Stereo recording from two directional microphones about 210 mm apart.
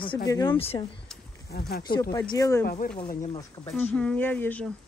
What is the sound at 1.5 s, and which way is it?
Speech, 50° left (ahead or behind).